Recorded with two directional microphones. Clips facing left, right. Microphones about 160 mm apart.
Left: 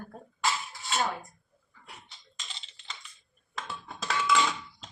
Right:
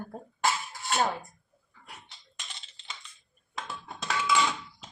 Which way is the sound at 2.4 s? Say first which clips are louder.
Even; 60° right (ahead or behind).